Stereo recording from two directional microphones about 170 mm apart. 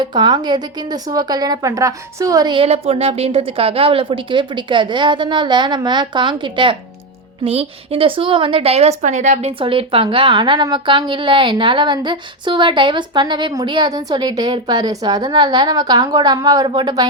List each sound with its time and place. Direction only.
0.0 s a woman's voice: 25° right (ahead or behind)